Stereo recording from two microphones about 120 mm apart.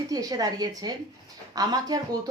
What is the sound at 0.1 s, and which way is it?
Speech, 30° right (ahead or behind).